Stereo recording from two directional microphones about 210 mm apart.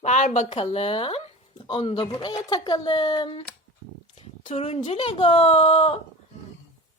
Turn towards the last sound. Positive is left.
turn(degrees=30)  # may be behind; listen again after turning